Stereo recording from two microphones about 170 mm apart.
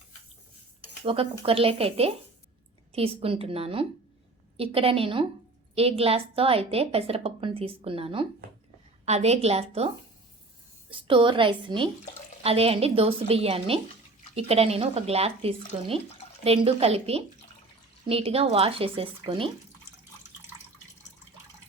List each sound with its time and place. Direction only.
1.0 s a woman's voice: 35° right (ahead or behind)
10.9 s a woman's voice: 30° right (ahead or behind)